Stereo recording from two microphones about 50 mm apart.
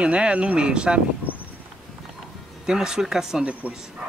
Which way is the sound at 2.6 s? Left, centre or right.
Centre.